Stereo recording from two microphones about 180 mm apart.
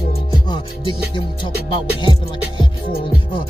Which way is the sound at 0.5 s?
25° left (ahead or behind).